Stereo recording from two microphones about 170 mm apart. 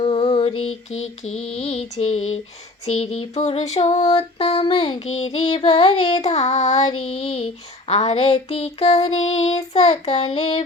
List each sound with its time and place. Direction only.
0.0 s mantra: 40° left (ahead or behind)
2.8 s child singing: 40° left (ahead or behind)